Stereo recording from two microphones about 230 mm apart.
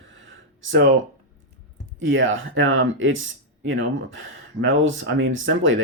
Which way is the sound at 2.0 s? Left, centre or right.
Right.